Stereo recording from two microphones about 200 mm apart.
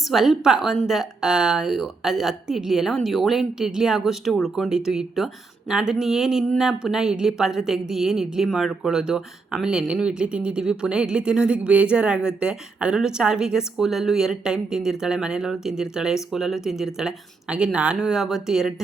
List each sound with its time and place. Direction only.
0.1 s a woman's voice: centre (ahead or behind)